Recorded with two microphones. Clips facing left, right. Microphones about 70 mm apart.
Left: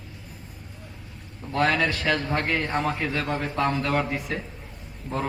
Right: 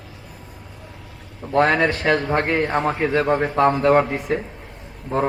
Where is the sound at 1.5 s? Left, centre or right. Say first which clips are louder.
Right 6 dB; right.